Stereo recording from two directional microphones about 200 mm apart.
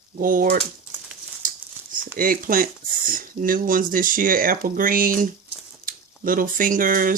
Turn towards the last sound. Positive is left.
turn(degrees=-45)  # may be behind; listen again after turning